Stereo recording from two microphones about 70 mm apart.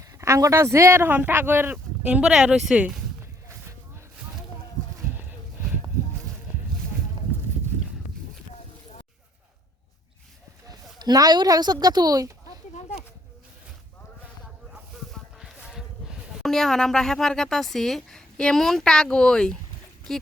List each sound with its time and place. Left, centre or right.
0.2 s speech: right
2.0 s speech: centre
10.7 s speech: right
15.4 s a sound: centre
16.5 s speech: centre